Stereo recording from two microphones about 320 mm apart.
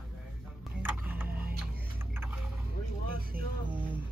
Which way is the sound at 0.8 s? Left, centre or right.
Centre.